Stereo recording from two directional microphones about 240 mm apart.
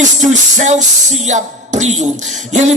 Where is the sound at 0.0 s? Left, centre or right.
Right.